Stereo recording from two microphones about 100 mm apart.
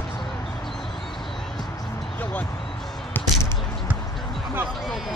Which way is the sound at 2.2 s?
15° left (ahead or behind).